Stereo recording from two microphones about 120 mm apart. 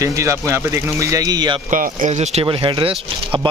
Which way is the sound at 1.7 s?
70° right (ahead or behind).